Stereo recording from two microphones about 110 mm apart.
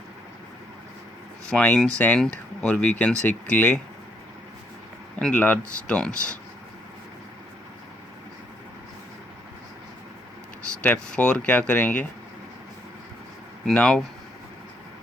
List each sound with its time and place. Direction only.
1.5 s speech: 10° left (ahead or behind)
5.2 s speech: 15° left (ahead or behind)
10.8 s speech: 10° left (ahead or behind)
13.7 s speech: 10° left (ahead or behind)